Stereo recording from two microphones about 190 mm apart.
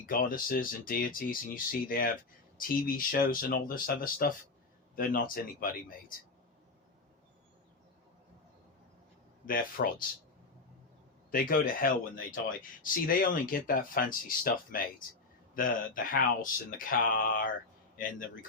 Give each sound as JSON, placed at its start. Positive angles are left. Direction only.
{"t": 0.0, "sound": "speech", "side_deg": 45}
{"t": 9.5, "sound": "speech", "side_deg": 45}
{"t": 11.3, "sound": "speech", "side_deg": 50}